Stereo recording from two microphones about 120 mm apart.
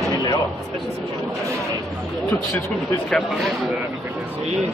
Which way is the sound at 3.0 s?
Centre (ahead or behind).